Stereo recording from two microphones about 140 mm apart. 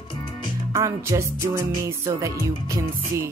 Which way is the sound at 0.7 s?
20° right (ahead or behind).